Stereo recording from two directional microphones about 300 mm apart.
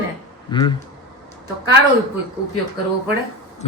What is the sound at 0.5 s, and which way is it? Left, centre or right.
Speech, centre.